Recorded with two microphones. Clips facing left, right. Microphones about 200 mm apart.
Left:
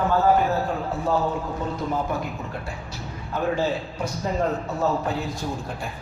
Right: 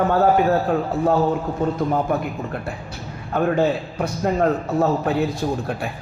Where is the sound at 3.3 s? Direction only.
60° right (ahead or behind).